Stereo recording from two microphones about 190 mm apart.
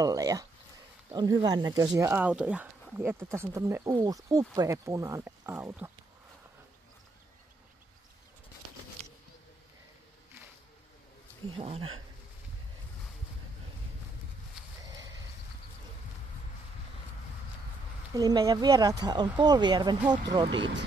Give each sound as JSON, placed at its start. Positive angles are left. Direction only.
{"t": 0.0, "sound": "speech", "side_deg": -20}
{"t": 11.5, "sound": "speech", "side_deg": -30}
{"t": 18.1, "sound": "speech", "side_deg": -20}